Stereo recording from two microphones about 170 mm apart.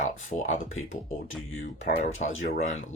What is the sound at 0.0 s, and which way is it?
Speech, 45° left (ahead or behind).